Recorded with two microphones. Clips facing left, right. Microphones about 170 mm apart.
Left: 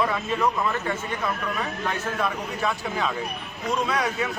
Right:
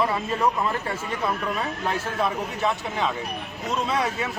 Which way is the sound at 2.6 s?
25° right (ahead or behind).